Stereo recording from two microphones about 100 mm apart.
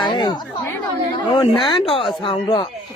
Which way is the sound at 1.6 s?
60° left (ahead or behind).